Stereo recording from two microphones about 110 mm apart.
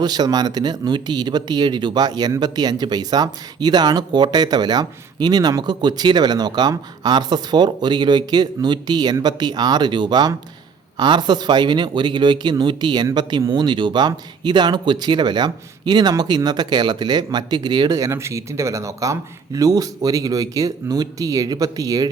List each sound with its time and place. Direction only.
0.0 s speech: 40° right (ahead or behind)